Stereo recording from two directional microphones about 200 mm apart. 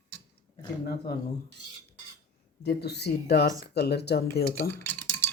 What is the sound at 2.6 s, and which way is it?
Speech, 55° left (ahead or behind).